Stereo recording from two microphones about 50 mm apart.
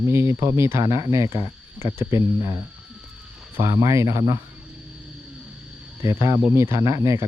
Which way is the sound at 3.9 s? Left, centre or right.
Right.